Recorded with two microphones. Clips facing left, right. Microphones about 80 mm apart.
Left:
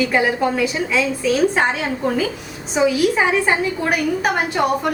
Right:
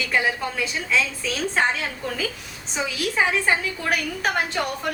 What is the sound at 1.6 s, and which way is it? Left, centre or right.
A woman's voice, left.